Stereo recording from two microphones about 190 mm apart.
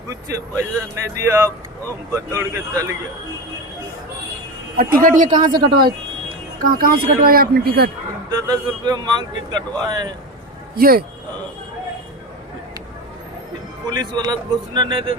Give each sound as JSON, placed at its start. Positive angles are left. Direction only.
{"t": 0.1, "sound": "speech", "side_deg": -15}
{"t": 4.8, "sound": "speech", "side_deg": -50}
{"t": 5.4, "sound": "a man's voice", "side_deg": -20}
{"t": 6.6, "sound": "speech", "side_deg": -50}
{"t": 8.3, "sound": "a man's voice", "side_deg": -20}
{"t": 10.8, "sound": "speech", "side_deg": -50}
{"t": 13.9, "sound": "a man's voice", "side_deg": -20}